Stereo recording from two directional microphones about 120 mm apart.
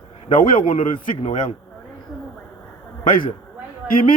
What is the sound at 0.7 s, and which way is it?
Speech, 85° left.